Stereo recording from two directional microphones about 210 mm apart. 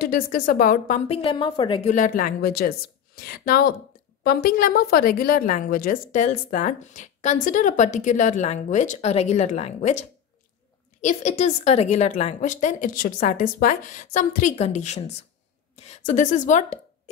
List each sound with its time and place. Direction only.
0.0 s a woman's voice: 45° left (ahead or behind); by 2.0 s 25° left (ahead or behind)
2.0 s a woman's voice: 40° left (ahead or behind)